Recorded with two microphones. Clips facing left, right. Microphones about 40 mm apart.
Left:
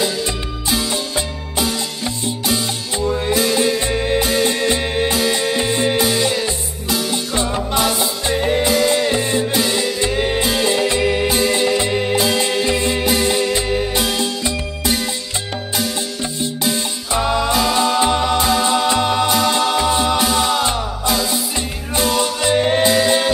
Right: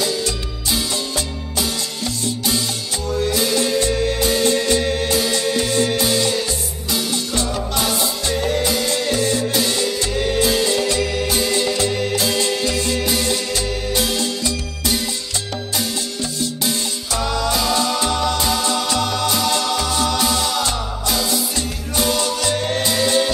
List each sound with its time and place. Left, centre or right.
0.7 s music: left
16.6 s music: left